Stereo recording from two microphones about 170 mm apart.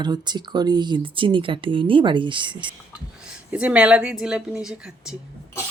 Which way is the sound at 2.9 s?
5° right (ahead or behind).